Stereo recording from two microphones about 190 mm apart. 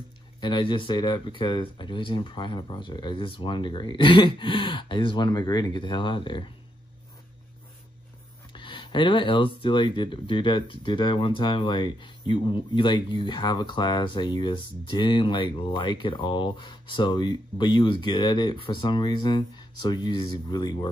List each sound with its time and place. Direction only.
0.4 s speech: 25° left (ahead or behind)
8.5 s a sound: 25° left (ahead or behind)
9.6 s speech: 25° left (ahead or behind)